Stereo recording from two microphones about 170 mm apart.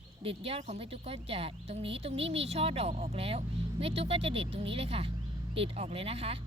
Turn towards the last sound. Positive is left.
turn(degrees=-35)  # may be behind; listen again after turning